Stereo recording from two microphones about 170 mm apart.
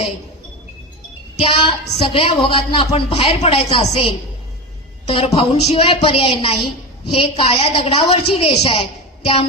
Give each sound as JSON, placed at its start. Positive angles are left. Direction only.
{"t": 1.4, "sound": "a woman's voice", "side_deg": 30}